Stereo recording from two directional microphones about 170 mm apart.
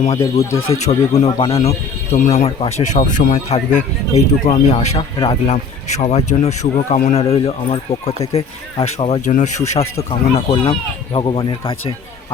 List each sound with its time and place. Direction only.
0.7 s speech: 40° left (ahead or behind)
5.5 s speech: 40° left (ahead or behind)